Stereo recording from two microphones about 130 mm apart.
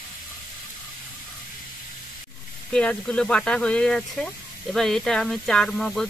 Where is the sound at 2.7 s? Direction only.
10° left (ahead or behind).